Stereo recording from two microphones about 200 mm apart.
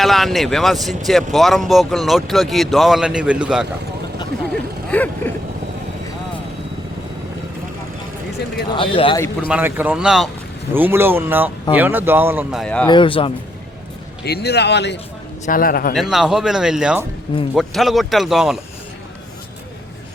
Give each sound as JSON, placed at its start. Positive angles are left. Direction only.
{"t": 0.0, "sound": "speech", "side_deg": 0}
{"t": 4.5, "sound": "a sound", "side_deg": 5}
{"t": 8.7, "sound": "speech", "side_deg": 25}
{"t": 9.5, "sound": "speech", "side_deg": -10}
{"t": 12.9, "sound": "speech", "side_deg": 25}
{"t": 14.3, "sound": "speech", "side_deg": 55}
{"t": 15.4, "sound": "a man's voice", "side_deg": 45}
{"t": 16.0, "sound": "speech", "side_deg": 0}